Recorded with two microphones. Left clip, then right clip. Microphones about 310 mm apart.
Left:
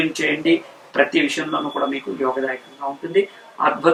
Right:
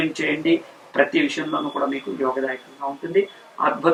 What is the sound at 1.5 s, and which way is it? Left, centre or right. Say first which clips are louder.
Speech: left 2 dB; right.